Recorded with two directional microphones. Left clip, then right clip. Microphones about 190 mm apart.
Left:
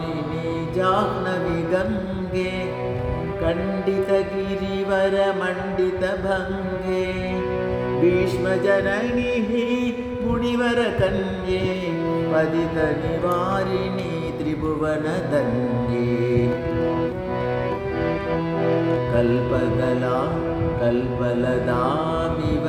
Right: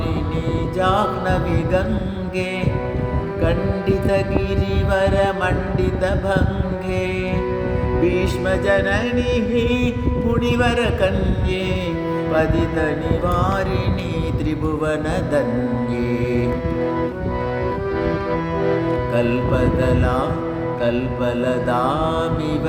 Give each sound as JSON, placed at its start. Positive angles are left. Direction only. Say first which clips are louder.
{"t": 0.8, "sound": "music", "louder": "right 2 dB", "side_deg": -25}
{"t": 3.4, "sound": "music", "louder": "right 2 dB", "side_deg": -25}
{"t": 8.0, "sound": "music", "louder": "left 1 dB", "side_deg": -25}
{"t": 12.3, "sound": "music", "louder": "right 3 dB", "side_deg": -25}
{"t": 14.8, "sound": "music", "louder": "right 3 dB", "side_deg": -25}
{"t": 18.7, "sound": "music", "louder": "even", "side_deg": -25}
{"t": 21.4, "sound": "music", "louder": "right 3 dB", "side_deg": -25}